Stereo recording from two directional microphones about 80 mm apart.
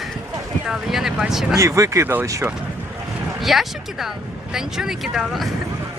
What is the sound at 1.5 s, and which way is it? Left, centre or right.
Speech, right.